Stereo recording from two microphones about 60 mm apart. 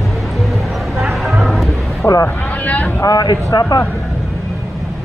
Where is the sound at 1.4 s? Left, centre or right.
Centre.